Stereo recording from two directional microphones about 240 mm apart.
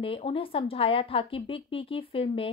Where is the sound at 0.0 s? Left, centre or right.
Left.